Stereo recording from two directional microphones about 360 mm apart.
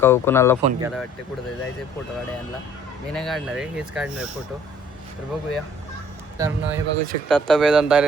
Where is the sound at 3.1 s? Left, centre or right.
Centre.